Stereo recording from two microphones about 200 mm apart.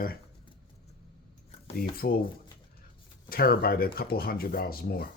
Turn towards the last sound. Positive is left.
turn(degrees=50)  # may be behind; listen again after turning